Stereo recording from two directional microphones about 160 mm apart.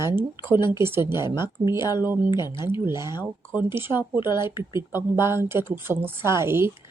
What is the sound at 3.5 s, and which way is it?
Speech, 15° right (ahead or behind).